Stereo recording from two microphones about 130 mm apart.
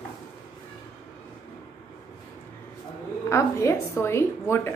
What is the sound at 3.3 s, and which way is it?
A woman's voice, 20° left (ahead or behind).